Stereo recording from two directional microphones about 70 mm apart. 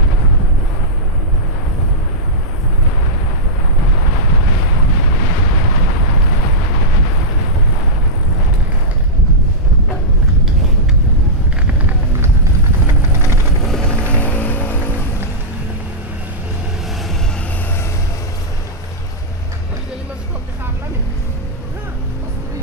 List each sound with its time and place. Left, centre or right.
14.1 s music: left